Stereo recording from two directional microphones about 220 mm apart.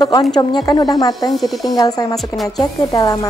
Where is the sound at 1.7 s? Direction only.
15° left (ahead or behind).